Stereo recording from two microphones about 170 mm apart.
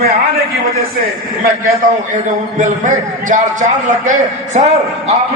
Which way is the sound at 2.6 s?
50° right (ahead or behind).